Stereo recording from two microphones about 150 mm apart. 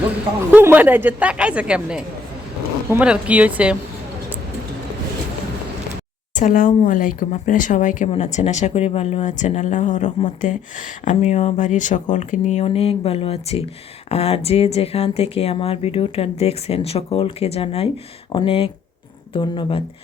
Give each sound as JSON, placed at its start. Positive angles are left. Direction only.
{"t": 0.5, "sound": "a woman's voice", "side_deg": -10}
{"t": 6.3, "sound": "speech", "side_deg": 65}